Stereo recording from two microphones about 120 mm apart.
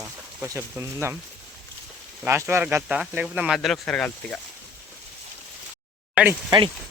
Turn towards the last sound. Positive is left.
turn(degrees=-45)  # may be behind; listen again after turning